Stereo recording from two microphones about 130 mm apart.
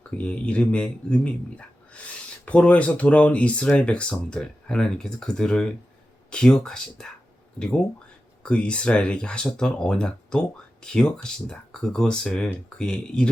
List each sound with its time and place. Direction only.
0.2 s speech: 10° left (ahead or behind)
8.4 s speech: 10° left (ahead or behind)